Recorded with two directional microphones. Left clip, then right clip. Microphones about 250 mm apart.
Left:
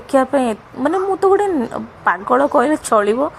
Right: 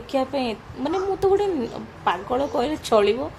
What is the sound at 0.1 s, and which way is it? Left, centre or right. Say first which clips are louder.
A woman's voice: left 9 dB; left.